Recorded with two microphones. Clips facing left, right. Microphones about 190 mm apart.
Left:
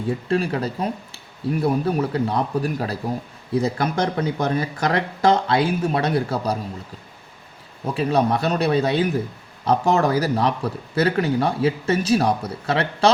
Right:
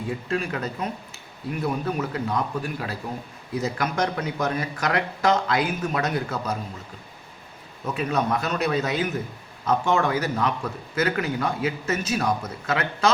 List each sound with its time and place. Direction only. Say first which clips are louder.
0.3 s speech: left 6 dB; 35° left (ahead or behind)
7.9 s speech: left 5 dB; 30° left (ahead or behind)